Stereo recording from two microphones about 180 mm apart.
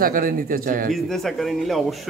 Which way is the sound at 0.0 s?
50° right (ahead or behind).